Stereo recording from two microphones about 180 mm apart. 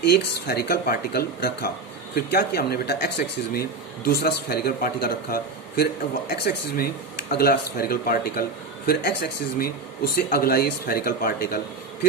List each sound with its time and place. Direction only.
0.0 s speech: 60° left (ahead or behind)